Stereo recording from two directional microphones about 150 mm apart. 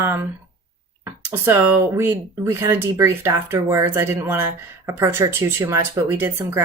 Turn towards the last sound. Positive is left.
turn(degrees=-15)  # may be behind; listen again after turning